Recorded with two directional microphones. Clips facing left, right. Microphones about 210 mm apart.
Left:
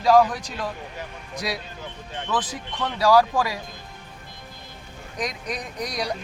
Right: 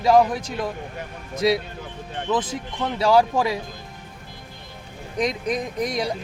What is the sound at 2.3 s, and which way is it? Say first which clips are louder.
Speech: right 4 dB; 25° right (ahead or behind).